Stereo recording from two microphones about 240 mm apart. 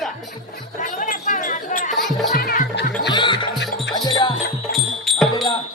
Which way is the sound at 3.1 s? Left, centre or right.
Centre.